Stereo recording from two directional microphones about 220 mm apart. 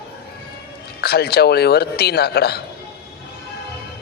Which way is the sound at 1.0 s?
45° left (ahead or behind).